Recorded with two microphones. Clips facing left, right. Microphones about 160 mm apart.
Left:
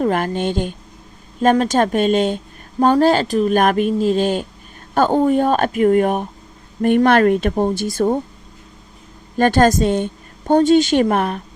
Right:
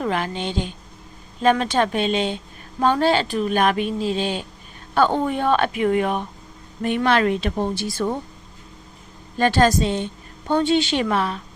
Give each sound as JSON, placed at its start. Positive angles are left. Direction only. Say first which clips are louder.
{"t": 0.0, "sound": "speech", "louder": "left 6 dB", "side_deg": 45}
{"t": 9.4, "sound": "speech", "louder": "left 4 dB", "side_deg": 50}